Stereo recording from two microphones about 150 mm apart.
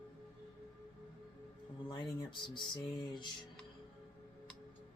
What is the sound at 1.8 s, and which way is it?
Music, 30° left (ahead or behind).